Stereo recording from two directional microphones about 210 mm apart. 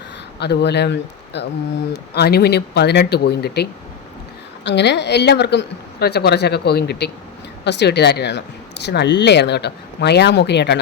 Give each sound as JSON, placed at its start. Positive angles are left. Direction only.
{"t": 0.3, "sound": "speech", "side_deg": 55}